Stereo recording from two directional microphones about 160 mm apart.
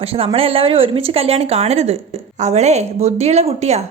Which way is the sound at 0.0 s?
35° right (ahead or behind).